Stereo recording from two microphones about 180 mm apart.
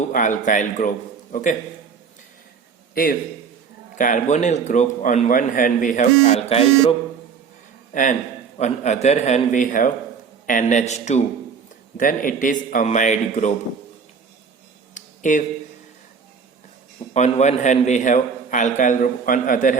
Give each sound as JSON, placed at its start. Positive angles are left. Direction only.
{"t": 0.1, "sound": "a man's voice", "side_deg": 45}
{"t": 2.9, "sound": "a man's voice", "side_deg": 55}
{"t": 7.9, "sound": "a man's voice", "side_deg": 50}
{"t": 14.9, "sound": "a sound", "side_deg": 45}
{"t": 17.2, "sound": "a man's voice", "side_deg": 40}